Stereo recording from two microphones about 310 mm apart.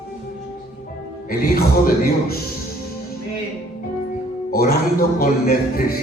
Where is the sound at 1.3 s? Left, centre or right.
Left.